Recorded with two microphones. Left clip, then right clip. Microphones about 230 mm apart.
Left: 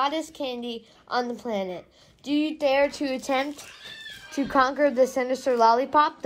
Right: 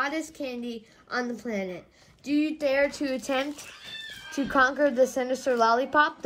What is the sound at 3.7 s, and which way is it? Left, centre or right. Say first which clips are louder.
Cat: right 1 dB; centre.